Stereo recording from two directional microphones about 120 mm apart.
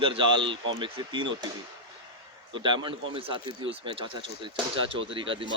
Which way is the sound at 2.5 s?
40° right (ahead or behind).